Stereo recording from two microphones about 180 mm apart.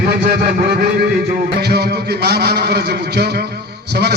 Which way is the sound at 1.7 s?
65° right (ahead or behind).